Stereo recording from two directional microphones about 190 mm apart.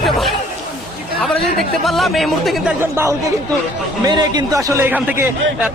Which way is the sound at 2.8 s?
15° right (ahead or behind).